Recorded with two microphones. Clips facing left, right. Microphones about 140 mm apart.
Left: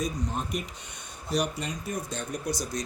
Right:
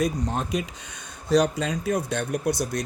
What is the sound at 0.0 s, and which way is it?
Speech, 80° right.